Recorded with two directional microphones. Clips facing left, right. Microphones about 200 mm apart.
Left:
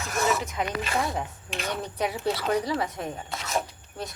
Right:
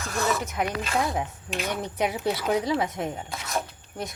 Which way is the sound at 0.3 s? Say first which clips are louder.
Right 1 dB; centre (ahead or behind).